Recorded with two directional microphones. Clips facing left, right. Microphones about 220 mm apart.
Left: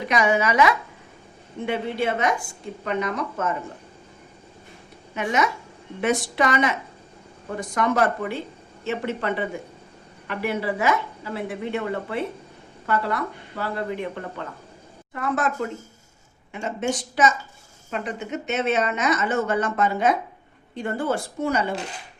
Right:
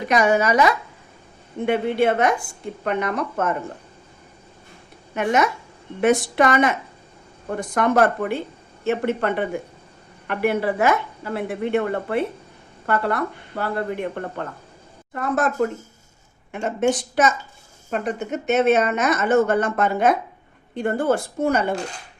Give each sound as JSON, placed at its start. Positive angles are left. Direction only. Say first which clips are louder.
{"t": 0.1, "sound": "a woman's voice", "louder": "right 3 dB", "side_deg": -45}
{"t": 1.6, "sound": "speech", "louder": "right 6 dB", "side_deg": -55}
{"t": 5.1, "sound": "a woman's voice", "louder": "right 4 dB", "side_deg": -55}